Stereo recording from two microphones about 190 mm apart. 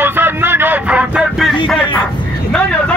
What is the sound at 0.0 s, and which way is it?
Vehicle, 10° right (ahead or behind).